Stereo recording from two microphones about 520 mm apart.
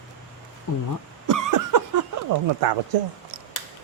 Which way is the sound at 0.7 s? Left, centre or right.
Left.